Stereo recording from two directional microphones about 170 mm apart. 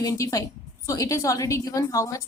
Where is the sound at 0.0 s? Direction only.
20° left (ahead or behind).